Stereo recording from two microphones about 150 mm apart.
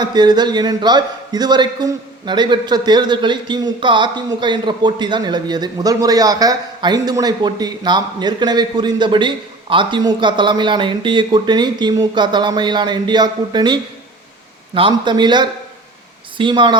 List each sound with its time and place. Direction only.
0.0 s a man's voice: 30° right (ahead or behind)
14.8 s a man's voice: 30° right (ahead or behind)